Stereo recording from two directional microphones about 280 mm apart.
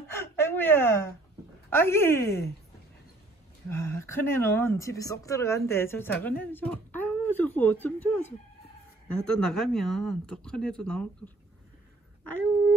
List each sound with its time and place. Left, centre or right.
0.1 s a sound: centre
1.7 s speech: centre
3.6 s speech: centre